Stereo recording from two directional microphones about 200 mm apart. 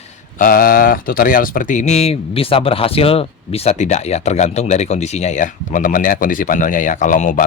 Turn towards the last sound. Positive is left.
turn(degrees=40)  # may be behind; listen again after turning